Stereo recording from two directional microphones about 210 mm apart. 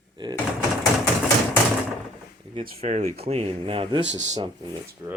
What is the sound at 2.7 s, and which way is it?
Speech, 35° right (ahead or behind).